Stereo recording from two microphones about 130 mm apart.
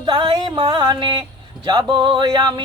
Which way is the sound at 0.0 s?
35° right (ahead or behind).